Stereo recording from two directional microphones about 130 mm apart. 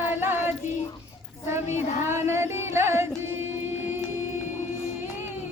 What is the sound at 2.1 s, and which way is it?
Singing, 20° right (ahead or behind).